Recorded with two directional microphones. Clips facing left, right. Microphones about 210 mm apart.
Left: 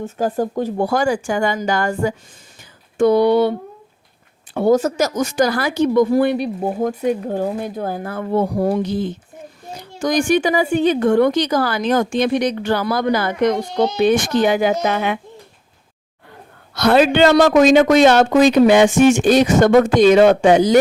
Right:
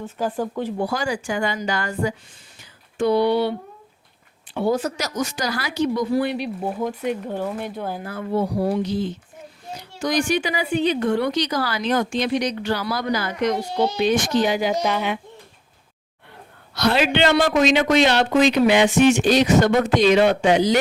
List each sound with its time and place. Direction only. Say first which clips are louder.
0.0 s speech: left 5 dB; 40° left (ahead or behind)
2.6 s a sound: left 7 dB; 45° left (ahead or behind)
4.5 s a child's voice: left 7 dB; 45° left (ahead or behind)
16.7 s speech: left 6 dB; 50° left (ahead or behind)